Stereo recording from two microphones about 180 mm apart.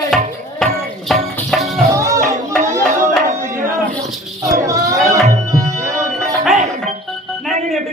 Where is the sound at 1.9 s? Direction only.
15° right (ahead or behind).